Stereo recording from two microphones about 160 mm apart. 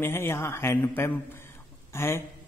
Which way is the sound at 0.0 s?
15° left (ahead or behind).